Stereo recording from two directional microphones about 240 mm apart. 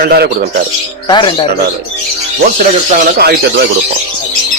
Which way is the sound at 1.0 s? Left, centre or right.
Centre.